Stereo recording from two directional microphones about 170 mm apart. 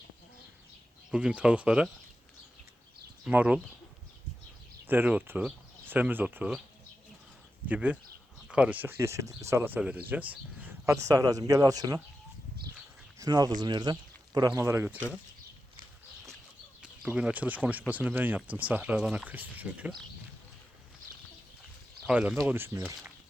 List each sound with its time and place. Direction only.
1.1 s speech: 5° right (ahead or behind)
3.2 s speech: 10° right (ahead or behind)
4.9 s speech: 10° right (ahead or behind)
7.7 s speech: 5° right (ahead or behind)
13.1 s speech: 20° right (ahead or behind)
16.8 s speech: 5° right (ahead or behind)
22.0 s speech: 5° right (ahead or behind)